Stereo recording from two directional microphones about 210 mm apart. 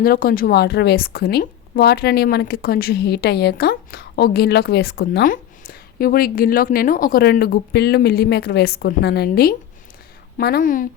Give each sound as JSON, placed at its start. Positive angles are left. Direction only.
{"t": 0.0, "sound": "a woman's voice", "side_deg": 45}